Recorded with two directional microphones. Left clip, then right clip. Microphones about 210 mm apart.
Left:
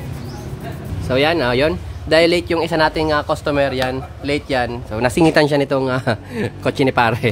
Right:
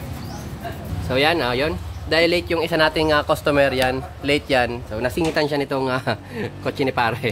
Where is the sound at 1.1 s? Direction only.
20° left (ahead or behind); by 4.8 s centre (ahead or behind).